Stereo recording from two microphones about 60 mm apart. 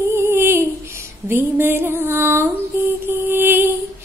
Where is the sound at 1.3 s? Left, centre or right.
Right.